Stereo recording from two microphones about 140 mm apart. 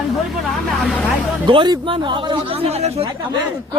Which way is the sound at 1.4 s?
35° right (ahead or behind).